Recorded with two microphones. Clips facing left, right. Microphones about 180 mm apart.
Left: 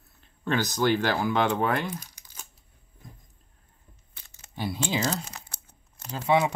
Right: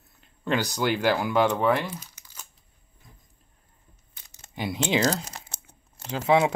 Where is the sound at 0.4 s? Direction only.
10° right (ahead or behind).